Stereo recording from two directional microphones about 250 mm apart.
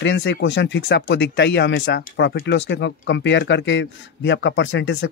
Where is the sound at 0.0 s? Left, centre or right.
Left.